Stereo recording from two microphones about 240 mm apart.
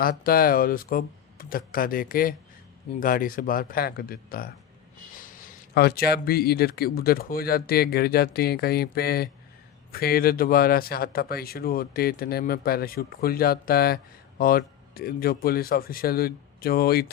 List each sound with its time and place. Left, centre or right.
0.0 s speech: left